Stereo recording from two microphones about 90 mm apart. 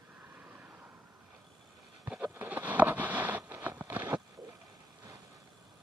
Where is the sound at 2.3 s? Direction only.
15° right (ahead or behind).